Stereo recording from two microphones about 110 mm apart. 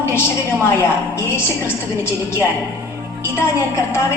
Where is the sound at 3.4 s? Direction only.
25° left (ahead or behind).